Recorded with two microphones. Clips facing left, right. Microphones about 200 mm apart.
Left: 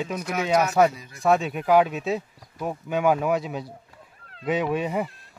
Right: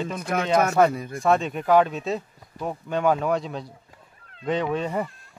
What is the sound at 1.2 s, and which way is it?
A man's voice, 5° left (ahead or behind).